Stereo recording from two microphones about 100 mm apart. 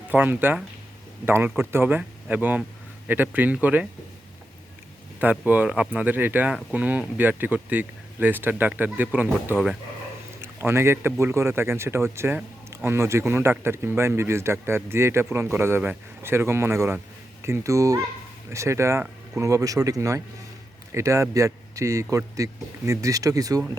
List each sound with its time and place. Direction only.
0.1 s speech: 20° right (ahead or behind)
5.5 s a man's voice: 15° right (ahead or behind); by 23.7 s 35° right (ahead or behind)